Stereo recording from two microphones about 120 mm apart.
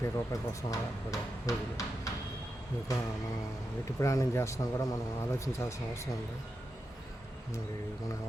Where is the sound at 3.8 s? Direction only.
25° left (ahead or behind).